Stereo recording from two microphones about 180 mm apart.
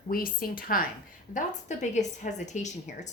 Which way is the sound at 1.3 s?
40° left (ahead or behind).